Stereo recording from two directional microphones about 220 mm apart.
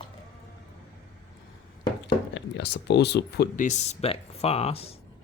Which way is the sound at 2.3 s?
55° left (ahead or behind).